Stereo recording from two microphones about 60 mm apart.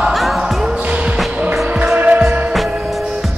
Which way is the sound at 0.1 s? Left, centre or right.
Centre.